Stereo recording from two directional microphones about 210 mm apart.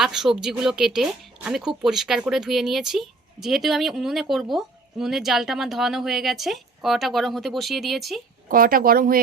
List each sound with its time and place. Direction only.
0.0 s speech: centre (ahead or behind)
8.4 s speech: 40° right (ahead or behind)